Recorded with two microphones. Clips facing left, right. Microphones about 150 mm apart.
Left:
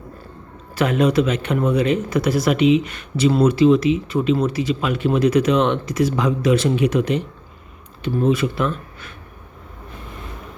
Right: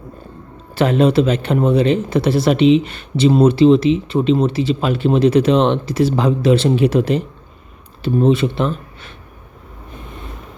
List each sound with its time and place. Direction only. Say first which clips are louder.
0.8 s speech: right 3 dB; 30° right (ahead or behind)